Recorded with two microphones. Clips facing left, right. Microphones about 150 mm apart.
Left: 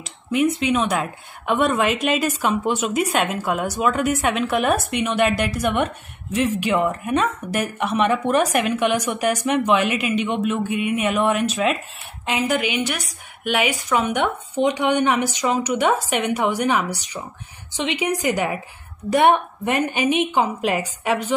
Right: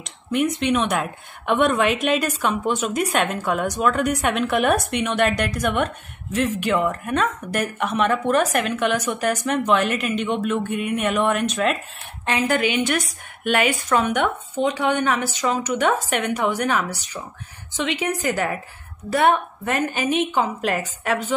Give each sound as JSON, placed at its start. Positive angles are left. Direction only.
{"t": 0.0, "sound": "speech", "side_deg": 0}